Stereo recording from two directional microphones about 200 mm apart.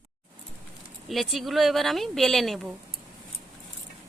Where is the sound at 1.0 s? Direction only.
Centre (ahead or behind).